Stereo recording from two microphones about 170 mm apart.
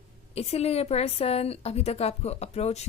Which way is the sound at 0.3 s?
35° left (ahead or behind).